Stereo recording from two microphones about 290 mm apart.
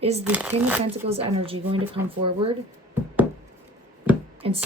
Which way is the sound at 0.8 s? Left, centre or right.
Centre.